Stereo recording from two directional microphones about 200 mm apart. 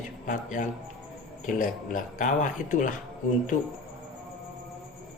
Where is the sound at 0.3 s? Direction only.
40° left (ahead or behind).